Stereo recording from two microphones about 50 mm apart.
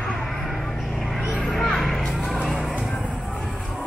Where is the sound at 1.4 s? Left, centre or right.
Centre.